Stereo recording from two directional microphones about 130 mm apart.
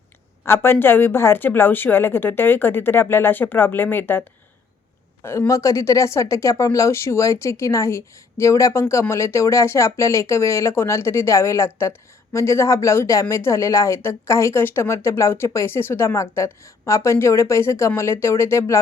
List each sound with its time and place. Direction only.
0.4 s a woman's voice: 20° left (ahead or behind)
5.2 s speech: 20° left (ahead or behind)